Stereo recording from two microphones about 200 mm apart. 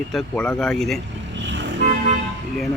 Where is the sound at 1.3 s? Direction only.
65° right (ahead or behind).